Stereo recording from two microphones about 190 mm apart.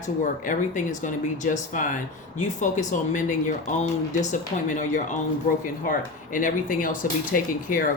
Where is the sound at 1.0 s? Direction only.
40° left (ahead or behind).